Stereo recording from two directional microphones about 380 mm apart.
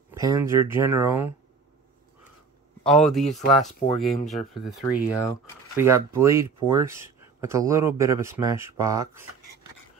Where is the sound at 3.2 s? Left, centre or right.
Centre.